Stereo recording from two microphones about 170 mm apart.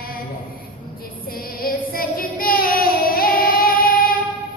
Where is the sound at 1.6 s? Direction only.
60° left (ahead or behind).